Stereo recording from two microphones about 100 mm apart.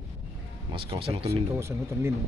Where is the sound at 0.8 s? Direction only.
65° right (ahead or behind).